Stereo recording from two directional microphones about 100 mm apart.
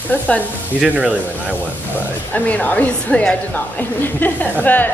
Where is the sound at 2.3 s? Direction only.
15° left (ahead or behind).